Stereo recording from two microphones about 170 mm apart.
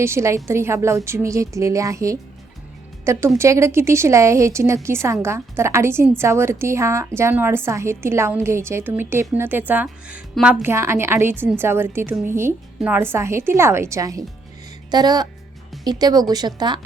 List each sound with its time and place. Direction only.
0.0 s a woman's voice: 15° right (ahead or behind)